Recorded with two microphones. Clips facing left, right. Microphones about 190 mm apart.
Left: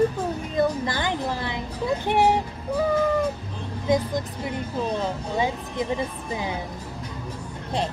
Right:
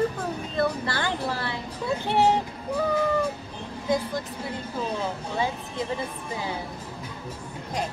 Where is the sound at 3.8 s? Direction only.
20° left (ahead or behind).